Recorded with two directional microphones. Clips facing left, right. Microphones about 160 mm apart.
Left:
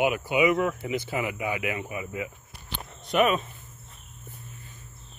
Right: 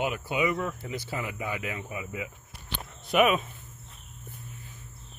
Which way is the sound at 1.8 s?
Centre (ahead or behind).